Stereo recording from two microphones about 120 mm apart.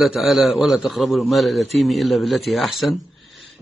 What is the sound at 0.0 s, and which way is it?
A man's voice, centre (ahead or behind).